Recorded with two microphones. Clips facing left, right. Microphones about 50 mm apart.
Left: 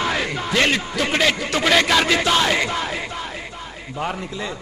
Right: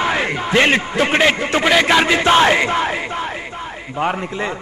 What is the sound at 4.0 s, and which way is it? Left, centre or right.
Speech, right.